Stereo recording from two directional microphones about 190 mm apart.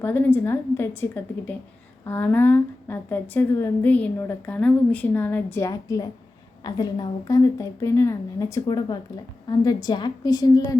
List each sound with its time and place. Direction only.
0.0 s a woman's voice: 10° left (ahead or behind)